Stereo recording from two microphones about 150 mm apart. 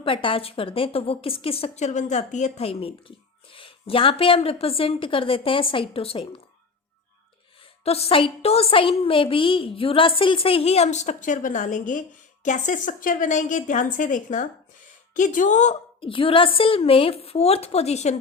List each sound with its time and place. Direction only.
0.0 s a woman's voice: 35° left (ahead or behind)
7.9 s a woman's voice: 40° left (ahead or behind)